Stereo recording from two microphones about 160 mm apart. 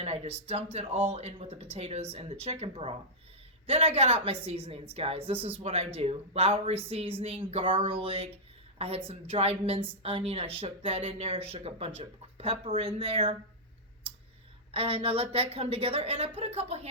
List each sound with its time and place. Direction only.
0.0 s a woman's voice: 40° right (ahead or behind)
14.7 s a woman's voice: 35° right (ahead or behind)